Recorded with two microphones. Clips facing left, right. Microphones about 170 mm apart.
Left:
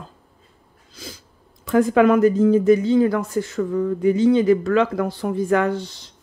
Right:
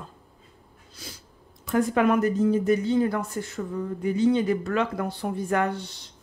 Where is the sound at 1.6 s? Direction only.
90° left.